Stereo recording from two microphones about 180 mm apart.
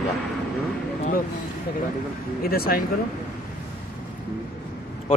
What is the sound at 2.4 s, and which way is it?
Speech, 55° left (ahead or behind).